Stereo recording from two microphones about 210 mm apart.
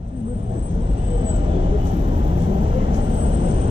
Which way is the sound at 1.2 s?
25° right (ahead or behind).